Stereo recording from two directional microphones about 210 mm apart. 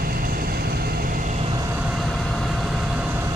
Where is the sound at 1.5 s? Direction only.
15° right (ahead or behind).